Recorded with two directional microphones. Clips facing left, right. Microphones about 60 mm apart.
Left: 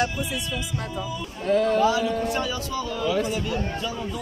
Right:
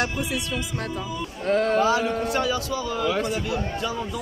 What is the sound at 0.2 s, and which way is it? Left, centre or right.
Speech, right.